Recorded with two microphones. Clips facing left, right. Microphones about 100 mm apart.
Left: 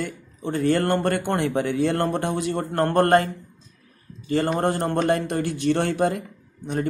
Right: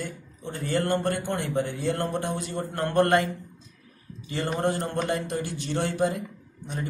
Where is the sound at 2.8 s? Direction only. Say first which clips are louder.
Left 4 dB; 45° left (ahead or behind).